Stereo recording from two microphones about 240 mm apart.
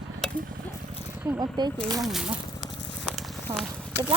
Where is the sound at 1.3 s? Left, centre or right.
Centre.